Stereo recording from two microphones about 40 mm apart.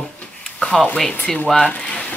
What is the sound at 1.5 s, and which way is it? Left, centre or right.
Speech, left.